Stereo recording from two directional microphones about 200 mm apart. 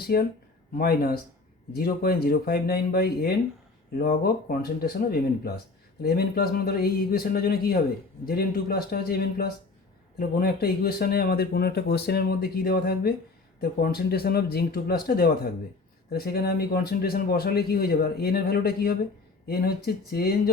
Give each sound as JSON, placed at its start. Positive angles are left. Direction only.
{"t": 0.0, "sound": "speech", "side_deg": 50}